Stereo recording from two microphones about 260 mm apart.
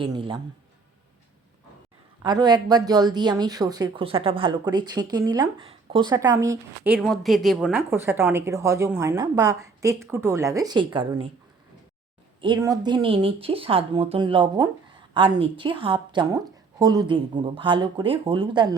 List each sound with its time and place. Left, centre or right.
0.0 s speech: centre
2.2 s speech: centre
12.4 s a woman's voice: centre